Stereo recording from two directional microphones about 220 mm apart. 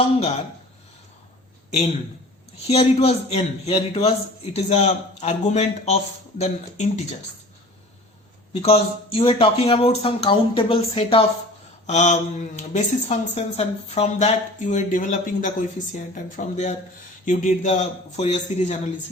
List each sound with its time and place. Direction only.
2.6 s speech: 30° left (ahead or behind)
8.6 s speech: 25° left (ahead or behind)